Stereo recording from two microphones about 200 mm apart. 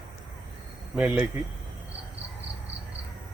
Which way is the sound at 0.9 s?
5° right (ahead or behind).